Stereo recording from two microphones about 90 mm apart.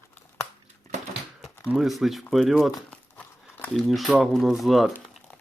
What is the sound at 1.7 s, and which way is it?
Speech, centre (ahead or behind).